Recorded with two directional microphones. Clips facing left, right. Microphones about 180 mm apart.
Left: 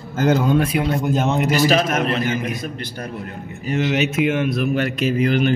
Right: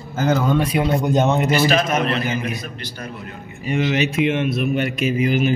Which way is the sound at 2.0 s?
45° left (ahead or behind).